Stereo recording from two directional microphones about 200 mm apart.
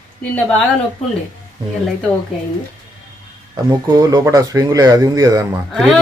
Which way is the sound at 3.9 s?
20° right (ahead or behind).